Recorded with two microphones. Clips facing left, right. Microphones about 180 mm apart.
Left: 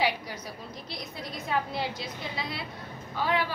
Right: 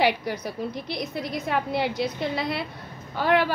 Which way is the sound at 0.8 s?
70° right (ahead or behind).